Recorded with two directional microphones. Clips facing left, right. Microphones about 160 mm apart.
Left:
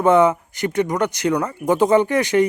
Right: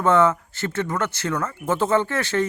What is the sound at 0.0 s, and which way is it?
Speech, 15° left (ahead or behind).